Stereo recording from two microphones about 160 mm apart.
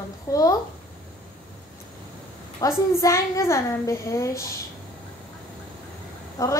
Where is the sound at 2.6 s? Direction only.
20° left (ahead or behind).